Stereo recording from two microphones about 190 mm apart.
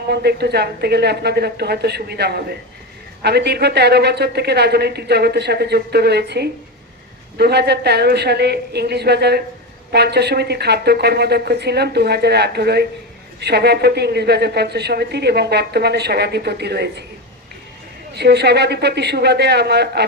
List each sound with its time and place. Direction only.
0.1 s a woman's voice: 60° right (ahead or behind)
18.1 s a woman's voice: 60° right (ahead or behind)